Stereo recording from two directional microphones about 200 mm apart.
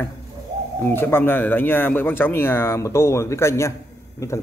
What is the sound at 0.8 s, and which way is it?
Speech, 10° left (ahead or behind).